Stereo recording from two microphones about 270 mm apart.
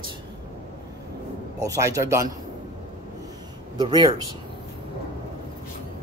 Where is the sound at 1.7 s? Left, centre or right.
Centre.